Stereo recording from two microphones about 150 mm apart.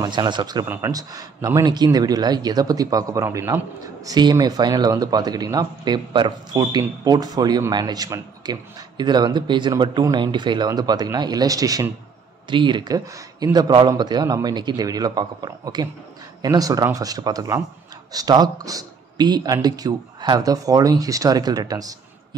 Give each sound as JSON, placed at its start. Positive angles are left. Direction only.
{"t": 0.0, "sound": "a man's voice", "side_deg": -30}